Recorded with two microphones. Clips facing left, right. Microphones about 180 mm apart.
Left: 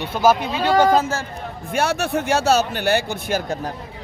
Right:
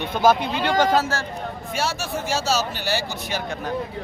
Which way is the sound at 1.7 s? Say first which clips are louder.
Left 7 dB; 60° left (ahead or behind).